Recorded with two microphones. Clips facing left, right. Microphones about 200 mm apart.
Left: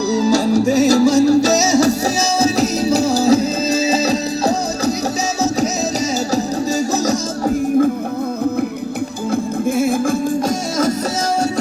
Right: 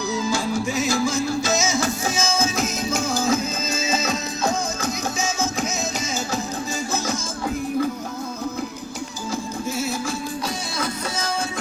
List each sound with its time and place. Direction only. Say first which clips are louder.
0.1 s music: left 10 dB; 40° left (ahead or behind)
6.3 s music: left 9 dB; 40° left (ahead or behind)
9.3 s music: left 10 dB; 55° left (ahead or behind)